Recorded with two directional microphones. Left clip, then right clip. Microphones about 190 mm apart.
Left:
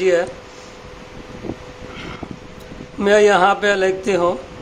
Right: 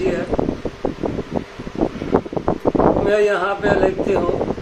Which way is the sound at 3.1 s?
60° left (ahead or behind).